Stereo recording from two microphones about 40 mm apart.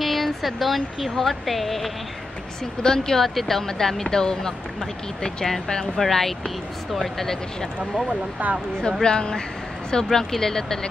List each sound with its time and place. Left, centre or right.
0.0 s speech: centre
2.8 s speech: centre
7.8 s speech: right
9.0 s speech: centre